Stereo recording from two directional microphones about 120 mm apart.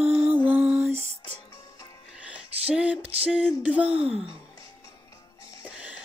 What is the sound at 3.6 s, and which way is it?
Music, 10° right (ahead or behind).